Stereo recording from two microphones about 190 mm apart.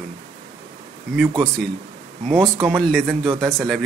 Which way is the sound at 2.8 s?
Centre (ahead or behind).